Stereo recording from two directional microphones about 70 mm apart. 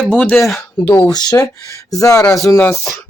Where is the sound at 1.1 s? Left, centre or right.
Left.